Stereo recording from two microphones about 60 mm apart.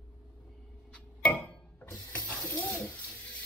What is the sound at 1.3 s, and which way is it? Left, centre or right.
Tick-tock, left.